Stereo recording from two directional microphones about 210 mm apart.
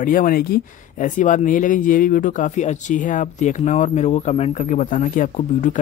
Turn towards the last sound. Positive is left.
turn(degrees=35)  # may be behind; listen again after turning